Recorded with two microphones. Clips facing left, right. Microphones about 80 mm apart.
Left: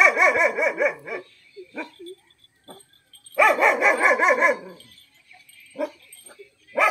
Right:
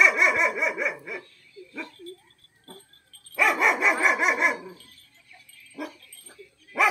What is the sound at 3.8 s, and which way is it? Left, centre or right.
Dog, centre.